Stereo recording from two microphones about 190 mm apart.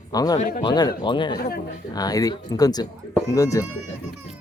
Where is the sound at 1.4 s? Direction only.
55° left (ahead or behind).